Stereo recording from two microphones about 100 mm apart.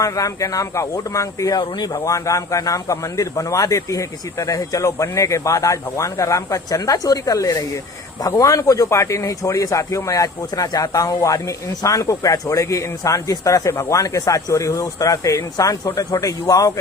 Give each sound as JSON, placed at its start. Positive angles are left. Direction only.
{"t": 0.0, "sound": "speech", "side_deg": 35}